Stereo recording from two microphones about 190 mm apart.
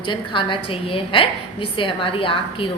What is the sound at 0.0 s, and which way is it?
A woman's voice, 25° left (ahead or behind).